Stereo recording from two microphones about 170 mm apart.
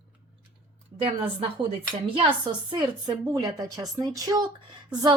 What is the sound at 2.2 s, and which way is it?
Speech, 30° right (ahead or behind).